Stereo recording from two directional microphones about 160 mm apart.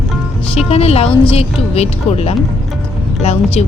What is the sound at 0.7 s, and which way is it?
Speech, 40° left (ahead or behind).